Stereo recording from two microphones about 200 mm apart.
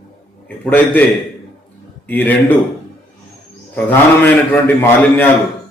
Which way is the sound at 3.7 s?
10° left (ahead or behind).